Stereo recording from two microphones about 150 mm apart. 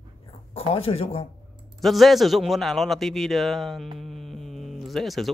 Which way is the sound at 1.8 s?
Centre (ahead or behind).